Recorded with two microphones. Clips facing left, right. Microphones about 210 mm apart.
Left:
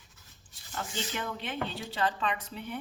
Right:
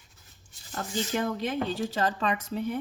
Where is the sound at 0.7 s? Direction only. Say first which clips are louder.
Right 6 dB; 40° right (ahead or behind).